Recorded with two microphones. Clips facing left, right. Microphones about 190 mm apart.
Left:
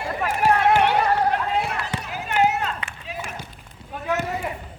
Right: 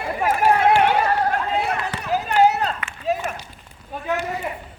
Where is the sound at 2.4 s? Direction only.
35° right (ahead or behind).